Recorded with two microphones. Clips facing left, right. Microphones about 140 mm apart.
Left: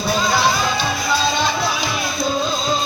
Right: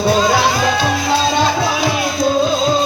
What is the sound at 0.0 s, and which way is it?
Music, 60° right (ahead or behind).